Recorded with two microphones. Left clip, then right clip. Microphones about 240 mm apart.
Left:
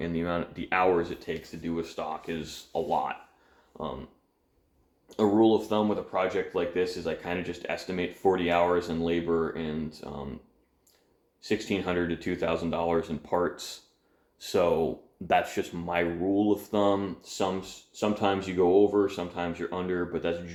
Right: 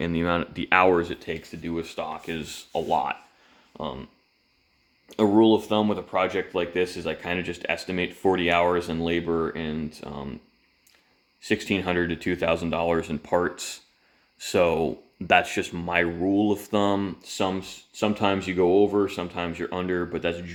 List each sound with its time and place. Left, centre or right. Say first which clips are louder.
0.0 s speech: right 5 dB; right
3.7 s a sound: right 3 dB; right
5.0 s speech: right 4 dB; right
11.3 s speech: right 4 dB; right